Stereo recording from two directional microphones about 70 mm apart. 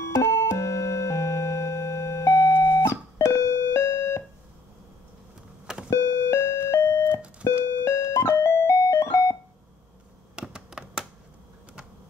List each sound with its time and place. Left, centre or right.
0.0 s music: left
5.9 s doorbell: left
7.6 s music: left
10.3 s computer keyboard: centre